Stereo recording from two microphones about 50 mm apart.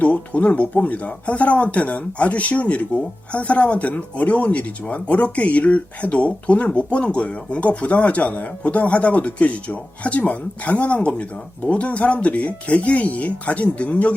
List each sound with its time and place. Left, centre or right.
0.0 s speech: left